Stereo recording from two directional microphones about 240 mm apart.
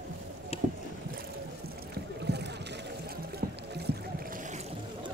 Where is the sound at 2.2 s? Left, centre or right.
Right.